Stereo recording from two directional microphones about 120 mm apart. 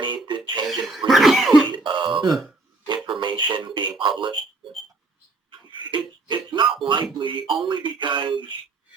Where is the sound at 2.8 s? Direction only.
40° right (ahead or behind).